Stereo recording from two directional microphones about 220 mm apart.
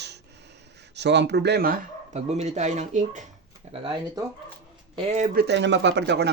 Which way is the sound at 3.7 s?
20° right (ahead or behind).